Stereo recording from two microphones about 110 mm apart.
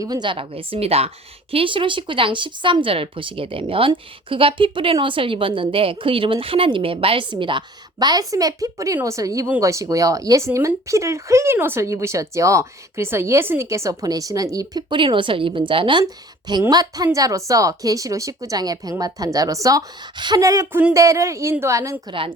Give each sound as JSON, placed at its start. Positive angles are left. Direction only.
{"t": 0.0, "sound": "a woman's voice", "side_deg": -40}
{"t": 16.5, "sound": "speech", "side_deg": -40}